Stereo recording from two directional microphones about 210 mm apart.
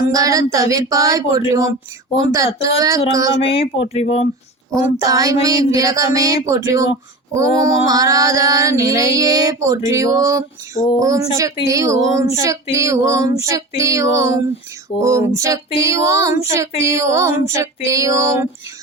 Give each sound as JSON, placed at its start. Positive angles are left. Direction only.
{"t": 0.1, "sound": "child singing", "side_deg": -15}
{"t": 3.9, "sound": "speech", "side_deg": 30}
{"t": 4.7, "sound": "child singing", "side_deg": -15}